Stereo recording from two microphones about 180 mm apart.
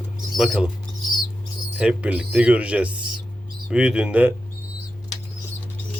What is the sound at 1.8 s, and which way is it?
Speech, 5° right (ahead or behind).